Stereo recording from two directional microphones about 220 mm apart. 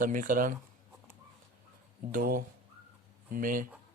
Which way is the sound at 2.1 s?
40° right (ahead or behind).